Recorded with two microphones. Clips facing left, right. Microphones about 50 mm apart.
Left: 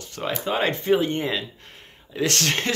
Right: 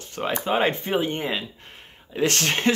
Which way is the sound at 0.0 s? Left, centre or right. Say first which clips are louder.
Right 2 dB; right.